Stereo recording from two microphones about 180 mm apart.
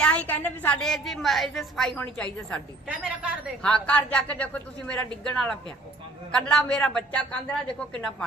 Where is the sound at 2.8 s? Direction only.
5° right (ahead or behind).